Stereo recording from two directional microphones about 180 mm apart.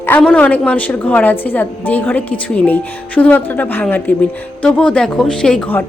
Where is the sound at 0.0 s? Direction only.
10° left (ahead or behind).